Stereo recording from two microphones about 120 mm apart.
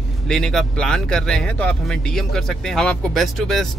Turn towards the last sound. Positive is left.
turn(degrees=0)  # may be behind; listen again after turning